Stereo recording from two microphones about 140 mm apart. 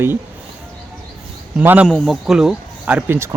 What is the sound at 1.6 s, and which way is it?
Speech, 10° right (ahead or behind).